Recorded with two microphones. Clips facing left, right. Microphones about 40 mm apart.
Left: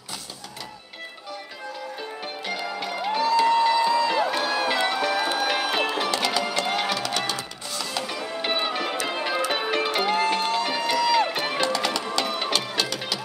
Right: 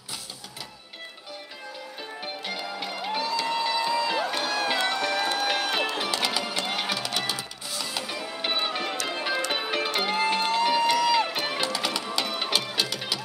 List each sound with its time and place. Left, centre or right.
2.0 s music: centre